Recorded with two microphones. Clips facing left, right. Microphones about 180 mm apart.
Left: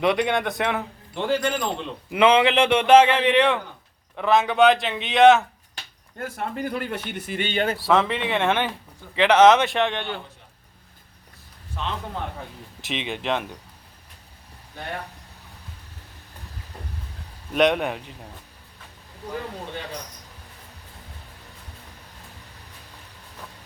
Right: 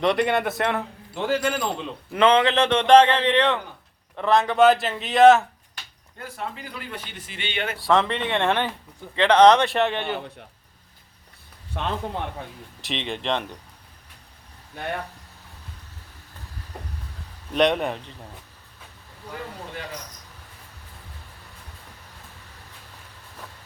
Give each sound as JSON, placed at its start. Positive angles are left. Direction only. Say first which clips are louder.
{"t": 0.0, "sound": "a man's voice", "louder": "even", "side_deg": 0}
{"t": 2.0, "sound": "a man's voice", "louder": "left 1 dB", "side_deg": 10}
{"t": 6.1, "sound": "speech", "louder": "left 5 dB", "side_deg": 50}
{"t": 7.8, "sound": "a man's voice", "louder": "right 3 dB", "side_deg": 0}
{"t": 11.8, "sound": "a man's voice", "louder": "right 2 dB", "side_deg": -65}
{"t": 12.8, "sound": "a man's voice", "louder": "even", "side_deg": 5}
{"t": 17.5, "sound": "a man's voice", "louder": "left 1 dB", "side_deg": 0}